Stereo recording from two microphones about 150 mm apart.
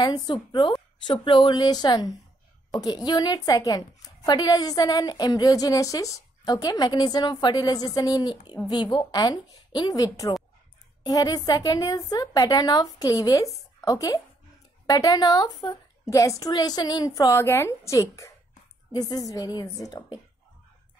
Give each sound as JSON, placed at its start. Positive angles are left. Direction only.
{"t": 0.0, "sound": "speech", "side_deg": 30}
{"t": 2.7, "sound": "a woman's voice", "side_deg": 0}
{"t": 3.1, "sound": "a woman's voice", "side_deg": 25}